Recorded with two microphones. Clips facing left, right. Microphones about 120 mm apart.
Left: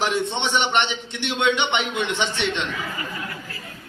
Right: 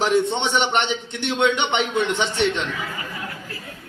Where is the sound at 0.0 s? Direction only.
45° right (ahead or behind).